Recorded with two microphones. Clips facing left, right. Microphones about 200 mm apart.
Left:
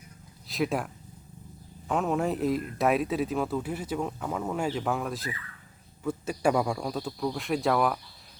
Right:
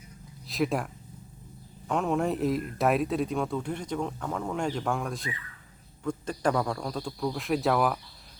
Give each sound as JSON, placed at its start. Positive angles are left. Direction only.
{"t": 0.4, "sound": "speech", "side_deg": 0}
{"t": 1.9, "sound": "speech", "side_deg": 0}